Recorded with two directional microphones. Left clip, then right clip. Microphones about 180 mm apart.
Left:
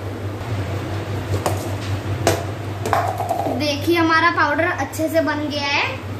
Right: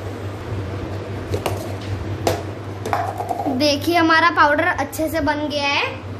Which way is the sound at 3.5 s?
60° right (ahead or behind).